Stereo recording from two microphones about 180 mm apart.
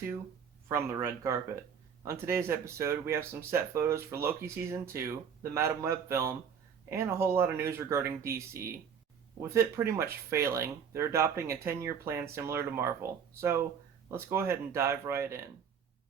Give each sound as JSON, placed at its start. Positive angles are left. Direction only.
{"t": 0.7, "sound": "speech", "side_deg": -15}